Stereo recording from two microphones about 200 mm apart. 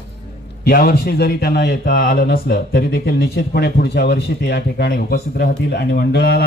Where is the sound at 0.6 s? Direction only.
50° left (ahead or behind).